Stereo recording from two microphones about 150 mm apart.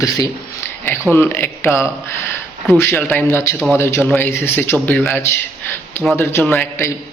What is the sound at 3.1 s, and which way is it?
A man's voice, 15° left (ahead or behind).